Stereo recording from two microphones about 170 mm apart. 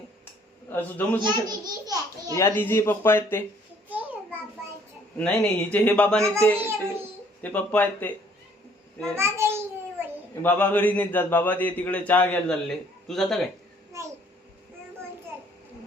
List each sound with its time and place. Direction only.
0.7 s a man's voice: 10° left (ahead or behind)
1.2 s a child's voice: 25° right (ahead or behind)
2.3 s a man's voice: 15° left (ahead or behind)
3.8 s a sound: 10° right (ahead or behind)
5.1 s a man's voice: 5° left (ahead or behind)
6.6 s a sound: 15° right (ahead or behind)
7.4 s a man's voice: 10° left (ahead or behind)
9.1 s a child's voice: 15° right (ahead or behind)
10.4 s a man's voice: 10° left (ahead or behind)